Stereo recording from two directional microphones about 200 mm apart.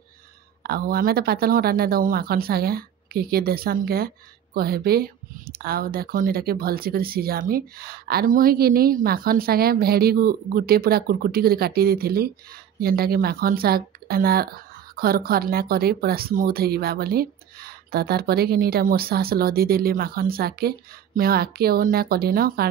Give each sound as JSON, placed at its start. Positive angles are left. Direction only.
{"t": 0.7, "sound": "speech", "side_deg": -50}